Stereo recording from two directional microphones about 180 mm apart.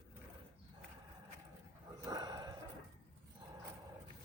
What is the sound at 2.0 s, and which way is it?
Dog, 20° right (ahead or behind).